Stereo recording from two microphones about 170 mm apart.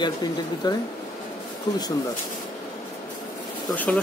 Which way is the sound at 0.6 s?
25° left (ahead or behind).